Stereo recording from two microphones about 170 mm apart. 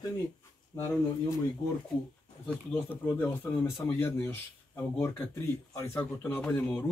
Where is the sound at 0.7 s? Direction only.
20° left (ahead or behind).